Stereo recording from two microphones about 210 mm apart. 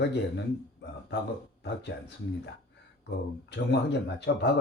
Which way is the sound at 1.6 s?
55° left (ahead or behind).